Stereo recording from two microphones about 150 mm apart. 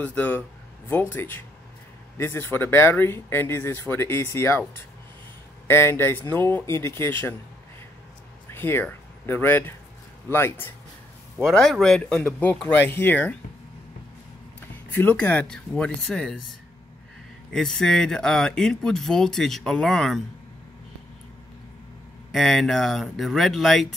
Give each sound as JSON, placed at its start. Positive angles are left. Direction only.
{"t": 0.0, "sound": "speech", "side_deg": 10}
{"t": 5.7, "sound": "speech", "side_deg": 15}
{"t": 8.5, "sound": "speech", "side_deg": 15}
{"t": 11.3, "sound": "speech", "side_deg": 5}
{"t": 14.9, "sound": "speech", "side_deg": 15}
{"t": 17.5, "sound": "speech", "side_deg": 5}
{"t": 22.3, "sound": "speech", "side_deg": 0}